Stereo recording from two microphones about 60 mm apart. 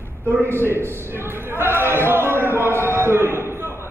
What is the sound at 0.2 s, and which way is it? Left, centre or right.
Speech, right.